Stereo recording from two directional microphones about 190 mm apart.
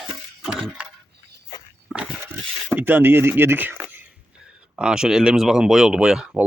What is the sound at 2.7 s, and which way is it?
Speech, 10° right (ahead or behind).